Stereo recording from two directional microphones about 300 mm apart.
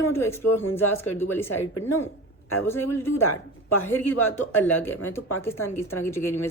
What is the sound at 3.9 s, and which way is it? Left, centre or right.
A woman's voice, centre.